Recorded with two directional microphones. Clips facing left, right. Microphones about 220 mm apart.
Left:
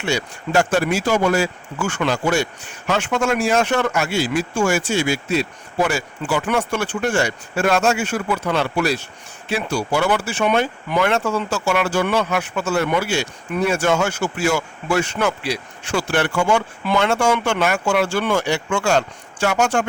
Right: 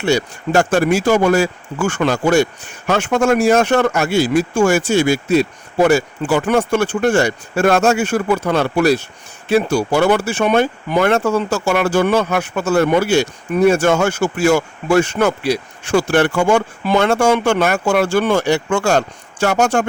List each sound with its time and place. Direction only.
0.0 s speech: 40° right (ahead or behind)